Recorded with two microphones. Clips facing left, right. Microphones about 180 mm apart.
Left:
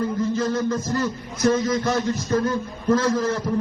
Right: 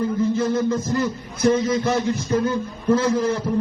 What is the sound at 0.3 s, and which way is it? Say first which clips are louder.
A man's voice: right 2 dB; 10° right (ahead or behind).